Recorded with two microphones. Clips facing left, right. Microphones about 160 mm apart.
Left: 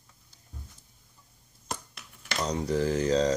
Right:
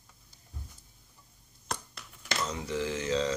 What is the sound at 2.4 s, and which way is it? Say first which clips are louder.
Speech: left 7 dB; 40° left (ahead or behind).